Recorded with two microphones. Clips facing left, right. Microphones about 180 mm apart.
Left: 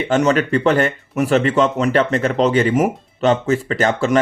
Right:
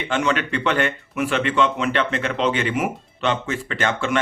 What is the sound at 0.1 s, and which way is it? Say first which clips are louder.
Speech: left 6 dB; 40° left (ahead or behind).